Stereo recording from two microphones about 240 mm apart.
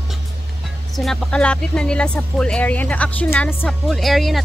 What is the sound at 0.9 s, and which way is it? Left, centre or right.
Speech, centre.